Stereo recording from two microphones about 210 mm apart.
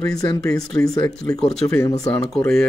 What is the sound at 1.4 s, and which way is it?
Speech, 5° left (ahead or behind).